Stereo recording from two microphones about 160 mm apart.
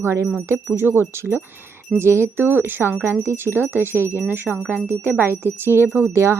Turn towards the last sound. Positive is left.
turn(degrees=-15)  # may be behind; listen again after turning